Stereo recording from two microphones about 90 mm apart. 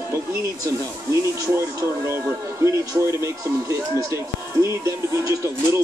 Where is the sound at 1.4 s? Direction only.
30° right (ahead or behind).